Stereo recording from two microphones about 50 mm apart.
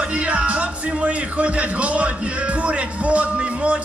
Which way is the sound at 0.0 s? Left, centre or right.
Right.